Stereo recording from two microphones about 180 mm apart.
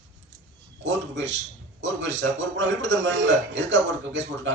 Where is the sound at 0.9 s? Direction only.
80° right.